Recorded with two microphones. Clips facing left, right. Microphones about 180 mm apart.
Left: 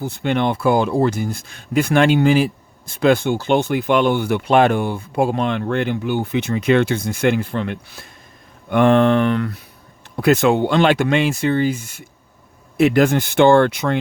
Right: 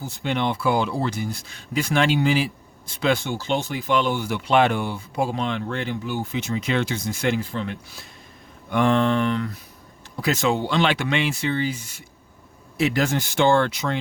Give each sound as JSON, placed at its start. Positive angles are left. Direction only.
{"t": 0.0, "sound": "speech", "side_deg": 60}